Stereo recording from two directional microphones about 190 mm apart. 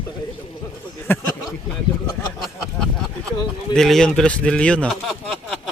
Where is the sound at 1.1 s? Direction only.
10° left (ahead or behind).